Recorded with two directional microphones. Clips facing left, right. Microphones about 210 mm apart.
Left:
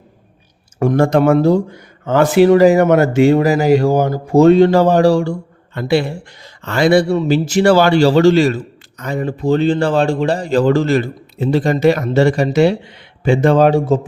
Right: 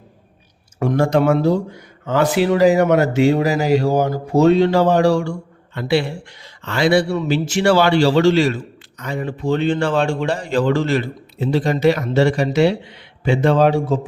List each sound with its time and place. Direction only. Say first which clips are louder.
0.8 s a man's voice: left 3 dB; 50° left (ahead or behind)